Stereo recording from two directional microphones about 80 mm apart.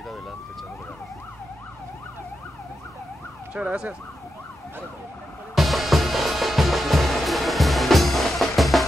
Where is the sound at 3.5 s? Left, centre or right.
Centre.